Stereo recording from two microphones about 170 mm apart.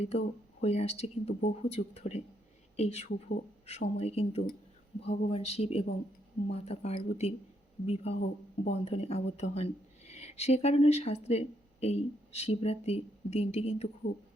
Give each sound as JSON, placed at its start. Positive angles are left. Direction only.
{"t": 0.0, "sound": "speech", "side_deg": 35}